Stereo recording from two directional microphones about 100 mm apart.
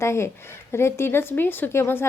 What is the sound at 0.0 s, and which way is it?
A woman's voice, 25° left (ahead or behind).